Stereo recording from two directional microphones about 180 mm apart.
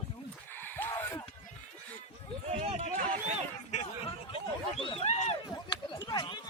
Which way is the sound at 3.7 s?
35° left (ahead or behind).